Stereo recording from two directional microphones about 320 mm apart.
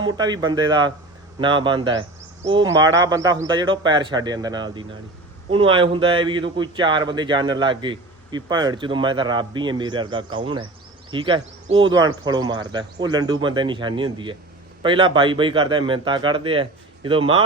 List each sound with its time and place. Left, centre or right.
0.0 s speech: centre